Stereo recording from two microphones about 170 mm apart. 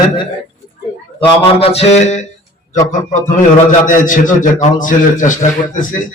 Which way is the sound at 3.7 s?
50° left (ahead or behind).